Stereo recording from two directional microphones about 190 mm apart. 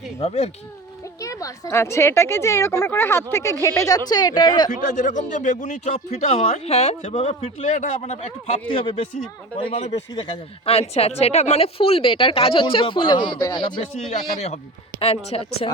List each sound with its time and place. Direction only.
0.2 s speech: 35° left (ahead or behind)
1.2 s a woman's voice: 15° left (ahead or behind)
4.8 s a woman's voice: 40° left (ahead or behind)